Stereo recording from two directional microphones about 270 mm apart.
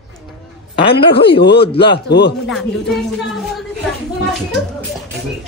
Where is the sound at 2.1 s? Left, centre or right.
Left.